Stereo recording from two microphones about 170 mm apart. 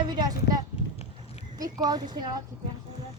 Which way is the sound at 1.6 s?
25° right (ahead or behind).